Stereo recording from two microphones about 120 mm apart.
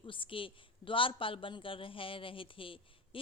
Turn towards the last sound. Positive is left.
turn(degrees=45)  # may be behind; listen again after turning